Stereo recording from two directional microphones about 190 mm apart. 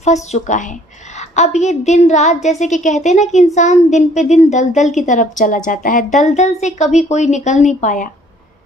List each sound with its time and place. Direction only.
0.0 s a woman's voice: 35° left (ahead or behind)